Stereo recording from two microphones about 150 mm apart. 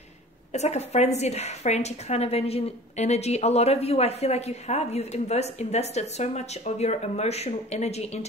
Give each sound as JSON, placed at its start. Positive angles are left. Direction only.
{"t": 0.5, "sound": "a woman's voice", "side_deg": 50}